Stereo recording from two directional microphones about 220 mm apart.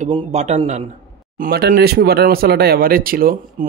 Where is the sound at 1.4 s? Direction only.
40° right (ahead or behind).